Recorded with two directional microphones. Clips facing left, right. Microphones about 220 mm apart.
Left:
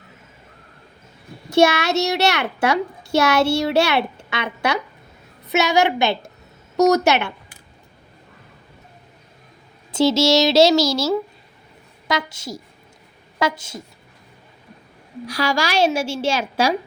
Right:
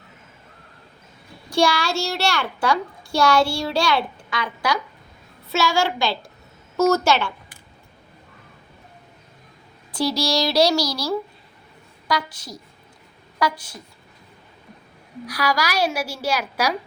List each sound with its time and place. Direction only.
1.5 s a woman's voice: 25° left (ahead or behind)
9.9 s a woman's voice: 25° left (ahead or behind)
15.3 s a woman's voice: 25° left (ahead or behind)